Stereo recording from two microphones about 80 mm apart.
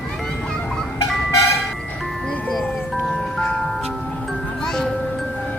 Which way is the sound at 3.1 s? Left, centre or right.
Centre.